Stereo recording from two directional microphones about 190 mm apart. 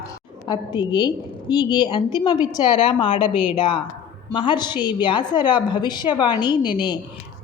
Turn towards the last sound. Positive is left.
turn(degrees=25)  # may be behind; listen again after turning